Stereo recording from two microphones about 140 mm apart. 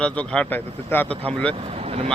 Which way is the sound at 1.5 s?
45° right (ahead or behind).